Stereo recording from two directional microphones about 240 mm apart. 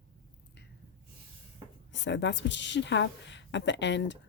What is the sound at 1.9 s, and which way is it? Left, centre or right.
A woman's voice, left.